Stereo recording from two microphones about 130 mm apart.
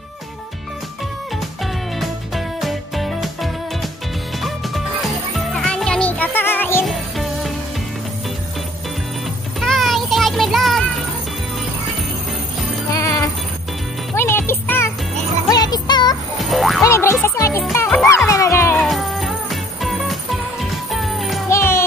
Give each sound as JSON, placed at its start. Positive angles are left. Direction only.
{"t": 1.6, "sound": "music", "side_deg": 0}
{"t": 6.9, "sound": "music", "side_deg": 0}
{"t": 9.6, "sound": "music", "side_deg": 0}
{"t": 12.9, "sound": "music", "side_deg": 25}
{"t": 15.5, "sound": "music", "side_deg": 30}
{"t": 16.3, "sound": "music", "side_deg": 0}
{"t": 16.8, "sound": "music", "side_deg": 20}
{"t": 17.8, "sound": "music", "side_deg": 5}
{"t": 18.1, "sound": "music", "side_deg": 20}
{"t": 18.8, "sound": "music", "side_deg": 0}
{"t": 21.5, "sound": "music", "side_deg": 20}